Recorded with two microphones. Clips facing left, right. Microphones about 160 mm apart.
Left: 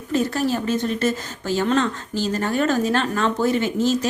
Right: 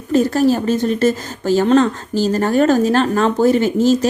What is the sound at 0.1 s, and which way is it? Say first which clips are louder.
A woman's voice: right 7 dB; 40° right (ahead or behind).